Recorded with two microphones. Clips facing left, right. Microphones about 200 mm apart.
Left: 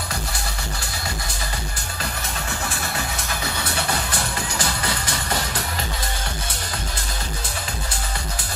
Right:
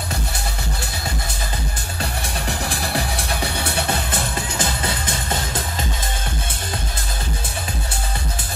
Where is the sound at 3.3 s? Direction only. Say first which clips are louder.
Right 3 dB; 30° right (ahead or behind).